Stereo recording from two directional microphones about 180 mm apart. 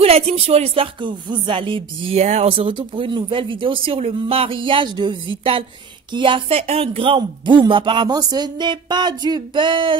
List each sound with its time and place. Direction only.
0.0 s music: 35° right (ahead or behind)